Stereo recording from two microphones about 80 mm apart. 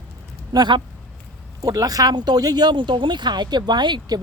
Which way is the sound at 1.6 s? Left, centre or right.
Right.